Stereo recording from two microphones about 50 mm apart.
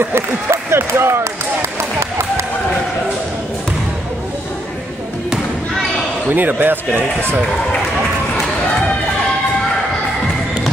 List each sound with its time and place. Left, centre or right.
0.0 s speech: right
6.3 s speech: right